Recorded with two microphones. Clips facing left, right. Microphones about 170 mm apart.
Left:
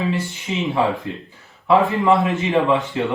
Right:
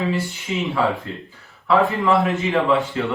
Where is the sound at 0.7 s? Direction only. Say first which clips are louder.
Left 2 dB; 20° left (ahead or behind).